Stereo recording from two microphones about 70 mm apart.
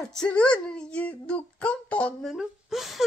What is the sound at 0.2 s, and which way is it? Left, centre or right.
Speech, centre.